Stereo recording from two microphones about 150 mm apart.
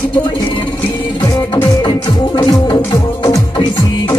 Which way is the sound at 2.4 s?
25° left (ahead or behind).